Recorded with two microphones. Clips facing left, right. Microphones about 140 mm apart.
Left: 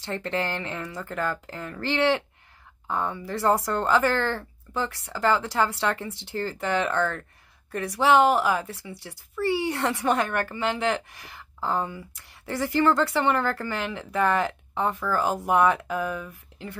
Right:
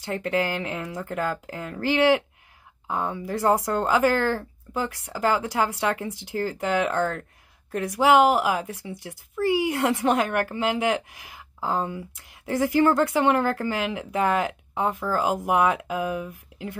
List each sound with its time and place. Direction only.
0.0 s speech: 10° right (ahead or behind)